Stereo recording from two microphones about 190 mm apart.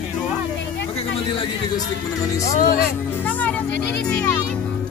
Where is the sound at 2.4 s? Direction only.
45° left (ahead or behind).